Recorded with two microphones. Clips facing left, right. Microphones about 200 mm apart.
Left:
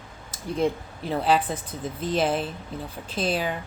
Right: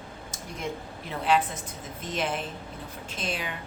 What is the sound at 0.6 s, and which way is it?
Speech, 35° left (ahead or behind).